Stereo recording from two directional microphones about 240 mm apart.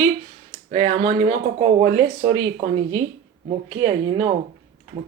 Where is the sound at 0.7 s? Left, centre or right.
Right.